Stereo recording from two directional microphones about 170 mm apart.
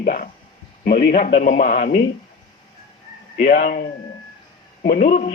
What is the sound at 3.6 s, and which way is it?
Speech, 60° left (ahead or behind).